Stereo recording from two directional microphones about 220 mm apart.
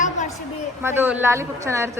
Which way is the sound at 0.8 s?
10° right (ahead or behind).